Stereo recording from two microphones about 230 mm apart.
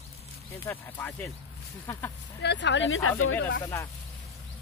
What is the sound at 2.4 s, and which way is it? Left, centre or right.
Speech, left.